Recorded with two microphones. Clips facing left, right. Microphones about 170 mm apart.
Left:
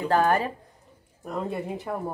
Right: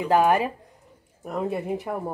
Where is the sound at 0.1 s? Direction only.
10° right (ahead or behind).